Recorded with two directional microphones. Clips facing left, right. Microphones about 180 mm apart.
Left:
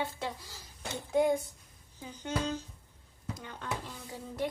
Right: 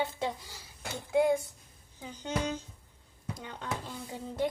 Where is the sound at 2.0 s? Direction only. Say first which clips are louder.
Right 1 dB; 15° right (ahead or behind).